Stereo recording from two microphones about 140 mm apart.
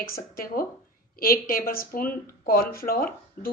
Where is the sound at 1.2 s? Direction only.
90° left.